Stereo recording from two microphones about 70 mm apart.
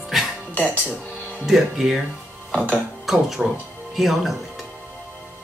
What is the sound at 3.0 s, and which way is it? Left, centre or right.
Speech, centre.